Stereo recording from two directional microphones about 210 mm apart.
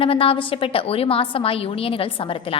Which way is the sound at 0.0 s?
25° left (ahead or behind).